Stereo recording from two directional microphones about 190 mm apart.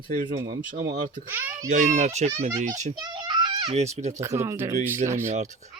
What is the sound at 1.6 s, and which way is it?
Speech, 40° right (ahead or behind).